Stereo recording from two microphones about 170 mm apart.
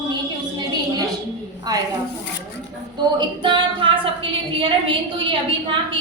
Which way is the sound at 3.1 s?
30° right (ahead or behind).